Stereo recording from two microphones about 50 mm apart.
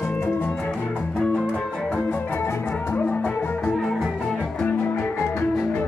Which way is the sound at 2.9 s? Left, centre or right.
Left.